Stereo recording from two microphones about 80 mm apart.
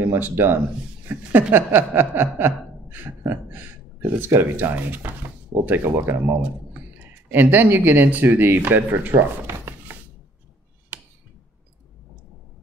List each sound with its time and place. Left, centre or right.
0.0 s speech: right